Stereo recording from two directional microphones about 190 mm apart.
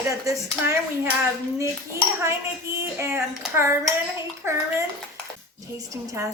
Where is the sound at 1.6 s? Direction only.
15° right (ahead or behind).